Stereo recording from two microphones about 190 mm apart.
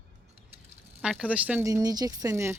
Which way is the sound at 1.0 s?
5° right (ahead or behind).